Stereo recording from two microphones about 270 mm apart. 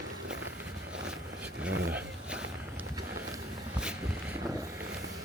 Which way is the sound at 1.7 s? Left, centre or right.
Right.